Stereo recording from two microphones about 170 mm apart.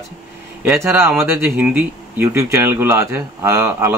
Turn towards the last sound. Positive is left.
turn(degrees=-15)  # may be behind; listen again after turning